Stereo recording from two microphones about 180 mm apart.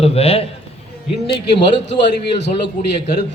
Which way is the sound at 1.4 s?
75° left (ahead or behind).